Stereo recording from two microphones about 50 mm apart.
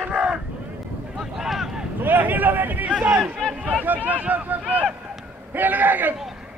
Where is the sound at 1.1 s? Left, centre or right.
Centre.